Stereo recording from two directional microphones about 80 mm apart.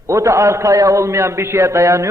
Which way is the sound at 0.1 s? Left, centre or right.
Right.